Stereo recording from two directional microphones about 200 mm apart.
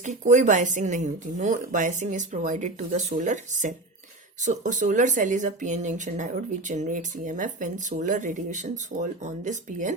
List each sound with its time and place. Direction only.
0.0 s speech: 35° right (ahead or behind)